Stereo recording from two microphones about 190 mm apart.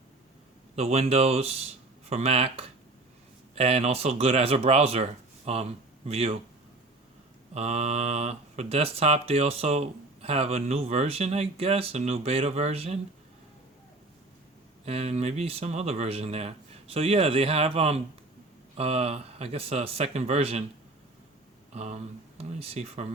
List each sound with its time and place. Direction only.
0.8 s speech: 35° right (ahead or behind)
7.5 s speech: 35° right (ahead or behind)
14.8 s speech: 35° right (ahead or behind)
21.7 s speech: 35° right (ahead or behind)